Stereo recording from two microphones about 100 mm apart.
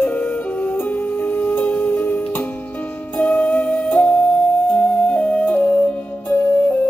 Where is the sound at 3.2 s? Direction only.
10° left (ahead or behind).